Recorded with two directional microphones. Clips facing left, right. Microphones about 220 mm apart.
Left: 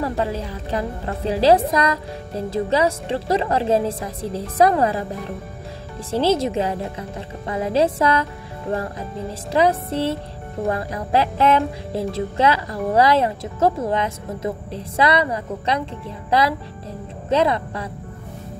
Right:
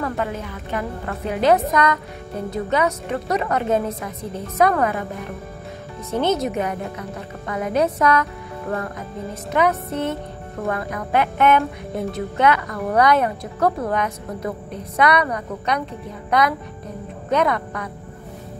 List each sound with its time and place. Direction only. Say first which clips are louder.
0.0 s a woman's voice: left 2 dB; 30° left (ahead or behind)
6.0 s a woman's voice: left 2 dB; 30° left (ahead or behind)